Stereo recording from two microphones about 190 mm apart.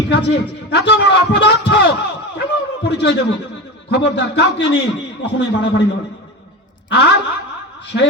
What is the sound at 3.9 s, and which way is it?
Speech, 60° left (ahead or behind).